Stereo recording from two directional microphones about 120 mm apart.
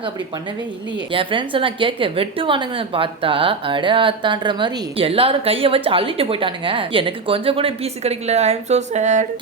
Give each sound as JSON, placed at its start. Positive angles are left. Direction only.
{"t": 1.1, "sound": "a woman's voice", "side_deg": -45}